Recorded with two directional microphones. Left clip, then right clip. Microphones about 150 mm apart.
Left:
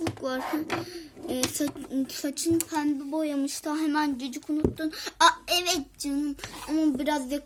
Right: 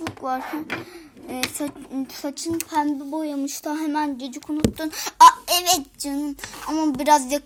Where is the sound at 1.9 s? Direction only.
15° left (ahead or behind).